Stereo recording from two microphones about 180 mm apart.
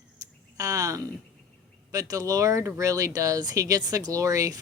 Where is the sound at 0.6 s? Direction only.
20° right (ahead or behind).